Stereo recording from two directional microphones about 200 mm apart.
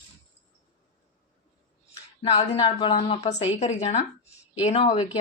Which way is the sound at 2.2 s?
30° left (ahead or behind).